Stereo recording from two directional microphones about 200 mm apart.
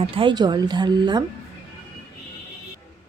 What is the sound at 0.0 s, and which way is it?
A woman's voice, 25° right (ahead or behind).